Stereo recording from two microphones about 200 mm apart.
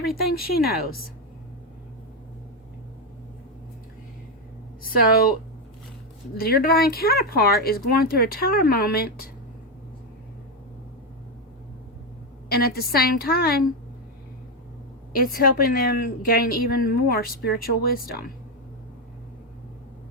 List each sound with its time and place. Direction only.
0.2 s a woman's voice: 50° left (ahead or behind)
4.8 s a woman's voice: 45° left (ahead or behind)
6.3 s a woman's voice: 50° left (ahead or behind)
12.5 s a woman's voice: 50° left (ahead or behind)
15.1 s a woman's voice: 45° left (ahead or behind)